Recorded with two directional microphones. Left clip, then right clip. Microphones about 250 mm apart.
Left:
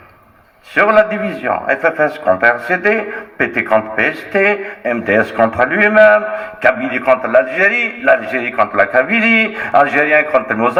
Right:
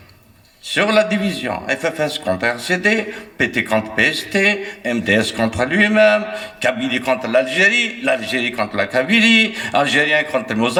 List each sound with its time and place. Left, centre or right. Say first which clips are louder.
0.8 s a man's voice: left 5 dB; right
2.4 s a man's voice: left 3 dB; right
5.5 s a man's voice: left 4 dB; right